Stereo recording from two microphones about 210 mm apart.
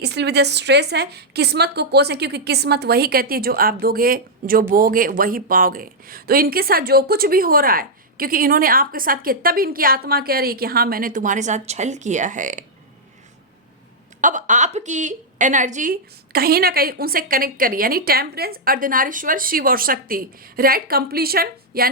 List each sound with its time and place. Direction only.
0.0 s speech: 55° right (ahead or behind); by 12.6 s 40° right (ahead or behind)
14.2 s speech: 35° right (ahead or behind)